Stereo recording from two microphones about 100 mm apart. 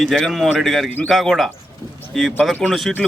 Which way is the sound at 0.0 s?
5° left (ahead or behind).